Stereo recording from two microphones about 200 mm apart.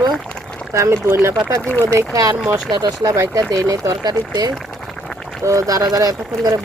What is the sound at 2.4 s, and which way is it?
Speech, 5° right (ahead or behind).